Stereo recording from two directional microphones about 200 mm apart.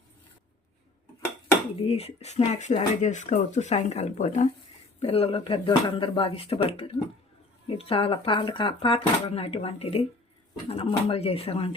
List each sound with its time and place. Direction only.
1.8 s speech: 30° left (ahead or behind)